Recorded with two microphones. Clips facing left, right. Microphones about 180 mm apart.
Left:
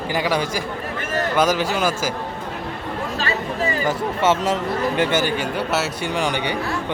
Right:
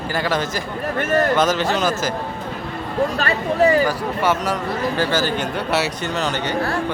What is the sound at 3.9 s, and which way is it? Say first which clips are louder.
A man's voice: left 1 dB; 25° left (ahead or behind).